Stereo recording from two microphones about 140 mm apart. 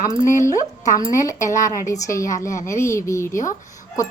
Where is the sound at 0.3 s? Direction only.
20° left (ahead or behind).